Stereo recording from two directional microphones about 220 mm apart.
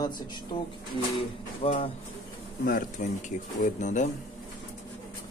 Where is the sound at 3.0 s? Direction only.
35° left (ahead or behind).